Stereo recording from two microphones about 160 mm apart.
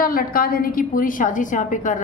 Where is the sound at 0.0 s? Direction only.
65° left (ahead or behind).